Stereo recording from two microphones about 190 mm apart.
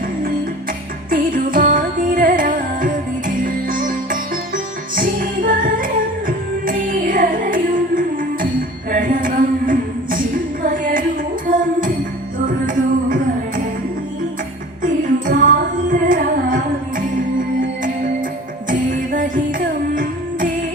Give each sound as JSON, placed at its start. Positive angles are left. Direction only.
{"t": 1.1, "sound": "music", "side_deg": -45}
{"t": 8.9, "sound": "a sound", "side_deg": -45}
{"t": 11.4, "sound": "music", "side_deg": -45}
{"t": 14.8, "sound": "music", "side_deg": -45}
{"t": 18.7, "sound": "music", "side_deg": -45}